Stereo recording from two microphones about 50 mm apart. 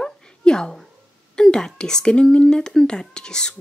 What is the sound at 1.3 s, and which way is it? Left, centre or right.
Speech, centre.